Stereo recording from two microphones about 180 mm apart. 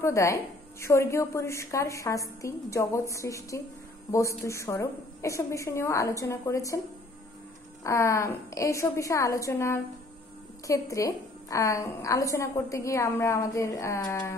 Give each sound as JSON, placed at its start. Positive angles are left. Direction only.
{"t": 0.0, "sound": "a woman's voice", "side_deg": 15}
{"t": 7.8, "sound": "a woman's voice", "side_deg": 15}